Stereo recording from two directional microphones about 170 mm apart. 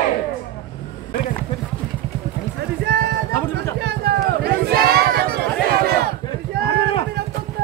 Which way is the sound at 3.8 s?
70° right (ahead or behind).